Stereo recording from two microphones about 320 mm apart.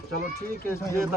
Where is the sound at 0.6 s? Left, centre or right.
Centre.